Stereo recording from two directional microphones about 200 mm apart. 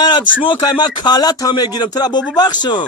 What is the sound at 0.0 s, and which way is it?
Speech, 20° left (ahead or behind).